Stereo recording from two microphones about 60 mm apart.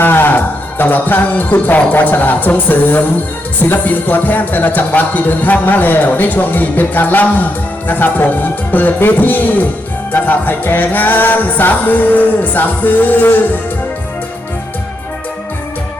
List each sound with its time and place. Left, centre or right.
0.0 s music: left
3.6 s speech: left